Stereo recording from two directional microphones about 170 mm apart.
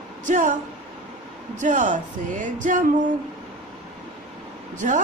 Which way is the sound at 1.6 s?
45° right (ahead or behind).